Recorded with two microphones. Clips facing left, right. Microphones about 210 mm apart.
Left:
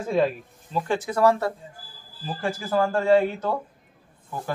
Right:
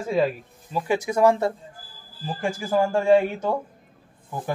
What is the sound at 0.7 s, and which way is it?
Speech, 10° right (ahead or behind).